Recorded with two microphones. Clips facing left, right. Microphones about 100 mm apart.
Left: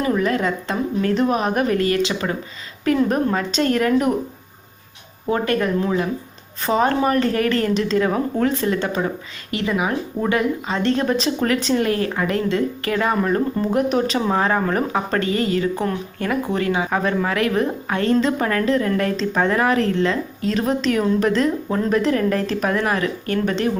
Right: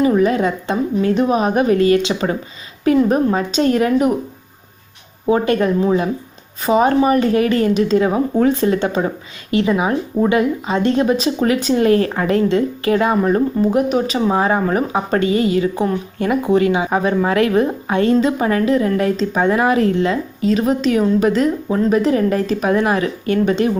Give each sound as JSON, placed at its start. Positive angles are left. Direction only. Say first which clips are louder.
{"t": 0.0, "sound": "a woman's voice", "louder": "right 5 dB", "side_deg": -15}
{"t": 3.0, "sound": "speech", "louder": "right 3 dB", "side_deg": -5}
{"t": 3.3, "sound": "speech", "louder": "right 4 dB", "side_deg": -15}
{"t": 5.2, "sound": "a woman's voice", "louder": "right 5 dB", "side_deg": -20}
{"t": 11.9, "sound": "speech", "louder": "right 5 dB", "side_deg": -35}
{"t": 12.5, "sound": "a woman's voice", "louder": "right 5 dB", "side_deg": -20}
{"t": 17.2, "sound": "speech", "louder": "right 5 dB", "side_deg": -25}
{"t": 20.4, "sound": "speech", "louder": "right 5 dB", "side_deg": -5}